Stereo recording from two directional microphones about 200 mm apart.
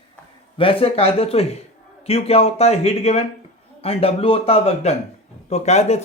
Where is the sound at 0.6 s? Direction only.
25° left (ahead or behind).